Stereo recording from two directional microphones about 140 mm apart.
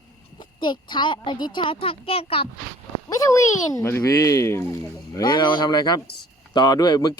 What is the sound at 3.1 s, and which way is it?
Speech, 20° left (ahead or behind).